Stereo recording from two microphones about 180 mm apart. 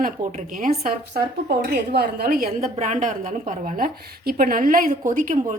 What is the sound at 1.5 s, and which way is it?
A woman's voice, 60° right (ahead or behind).